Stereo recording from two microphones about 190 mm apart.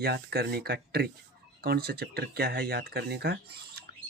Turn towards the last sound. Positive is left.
turn(degrees=-60)  # may be behind; listen again after turning